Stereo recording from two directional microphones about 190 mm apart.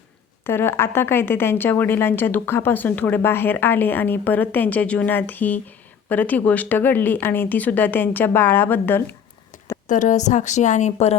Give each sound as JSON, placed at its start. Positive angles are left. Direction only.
{"t": 0.4, "sound": "a woman's voice", "side_deg": 10}
{"t": 9.8, "sound": "a woman's voice", "side_deg": 40}